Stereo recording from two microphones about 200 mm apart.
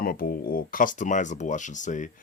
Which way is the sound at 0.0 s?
45° left (ahead or behind).